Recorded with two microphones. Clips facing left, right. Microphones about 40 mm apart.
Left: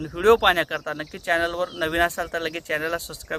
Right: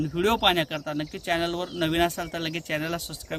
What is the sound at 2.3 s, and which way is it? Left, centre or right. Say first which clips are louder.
Speech: left 4 dB; right.